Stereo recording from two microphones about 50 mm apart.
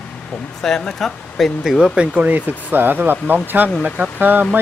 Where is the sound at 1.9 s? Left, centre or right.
Right.